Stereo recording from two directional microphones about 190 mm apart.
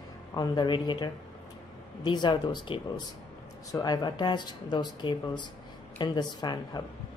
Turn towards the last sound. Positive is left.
turn(degrees=20)  # may be behind; listen again after turning